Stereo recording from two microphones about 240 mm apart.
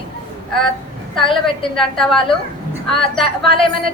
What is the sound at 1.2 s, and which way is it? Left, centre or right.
Speech, left.